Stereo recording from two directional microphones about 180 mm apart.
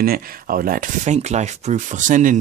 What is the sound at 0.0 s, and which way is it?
Speech, 55° right (ahead or behind).